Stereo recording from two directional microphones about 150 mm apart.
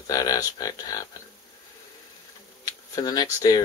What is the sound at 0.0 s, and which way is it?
Speech, 25° left (ahead or behind).